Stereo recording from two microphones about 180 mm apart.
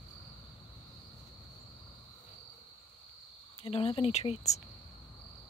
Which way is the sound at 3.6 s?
30° left (ahead or behind).